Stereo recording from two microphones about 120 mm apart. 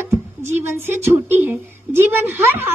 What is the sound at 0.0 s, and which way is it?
Speech, 20° right (ahead or behind).